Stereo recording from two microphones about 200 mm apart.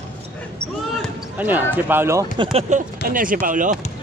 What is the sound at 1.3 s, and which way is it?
Speech, 10° right (ahead or behind).